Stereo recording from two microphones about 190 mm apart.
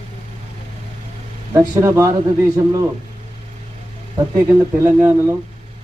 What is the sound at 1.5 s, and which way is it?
Speech, 15° right (ahead or behind).